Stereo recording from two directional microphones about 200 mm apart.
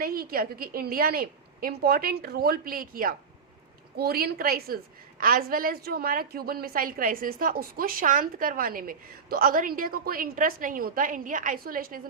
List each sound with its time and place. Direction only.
0.0 s a woman's voice: 45° right (ahead or behind)